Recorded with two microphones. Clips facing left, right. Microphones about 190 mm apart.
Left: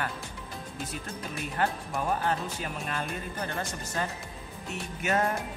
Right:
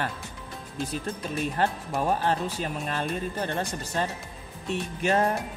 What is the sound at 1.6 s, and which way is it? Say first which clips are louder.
Speech: right 1 dB; 35° right (ahead or behind).